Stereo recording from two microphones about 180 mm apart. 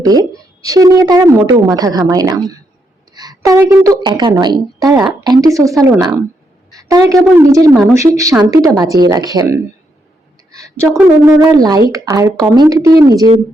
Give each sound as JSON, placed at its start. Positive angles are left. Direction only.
{"t": 0.0, "sound": "a woman's voice", "side_deg": -20}
{"t": 3.2, "sound": "a sound", "side_deg": -20}
{"t": 4.0, "sound": "a woman's voice", "side_deg": -25}
{"t": 6.7, "sound": "a sound", "side_deg": -20}
{"t": 7.3, "sound": "a woman's voice", "side_deg": -15}
{"t": 10.9, "sound": "a woman's voice", "side_deg": -15}